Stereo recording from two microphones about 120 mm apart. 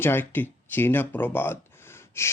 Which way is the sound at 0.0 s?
15° left (ahead or behind).